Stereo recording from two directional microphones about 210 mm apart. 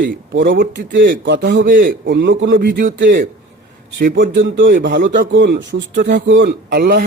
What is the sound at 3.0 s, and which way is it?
A man's voice, 40° right (ahead or behind).